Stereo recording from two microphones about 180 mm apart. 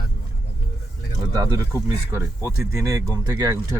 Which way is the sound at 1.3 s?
20° right (ahead or behind).